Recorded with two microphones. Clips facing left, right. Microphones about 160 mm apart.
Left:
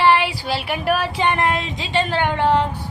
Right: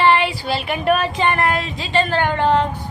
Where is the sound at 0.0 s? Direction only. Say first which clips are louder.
Right 1 dB; 10° left (ahead or behind).